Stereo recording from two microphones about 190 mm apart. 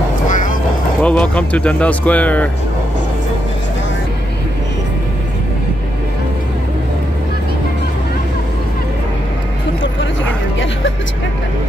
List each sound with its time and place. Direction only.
0.3 s vehicle: 40° left (ahead or behind)
1.0 s speech: 5° left (ahead or behind)